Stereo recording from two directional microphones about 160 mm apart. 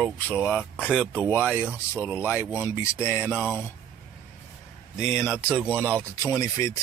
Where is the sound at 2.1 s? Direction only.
15° left (ahead or behind).